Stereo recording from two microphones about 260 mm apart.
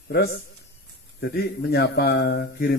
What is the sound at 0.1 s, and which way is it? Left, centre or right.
A man's voice, left.